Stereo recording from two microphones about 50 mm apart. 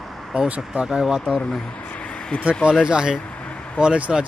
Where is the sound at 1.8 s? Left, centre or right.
Left.